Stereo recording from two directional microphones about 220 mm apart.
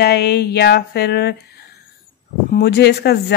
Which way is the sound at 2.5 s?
45° left (ahead or behind).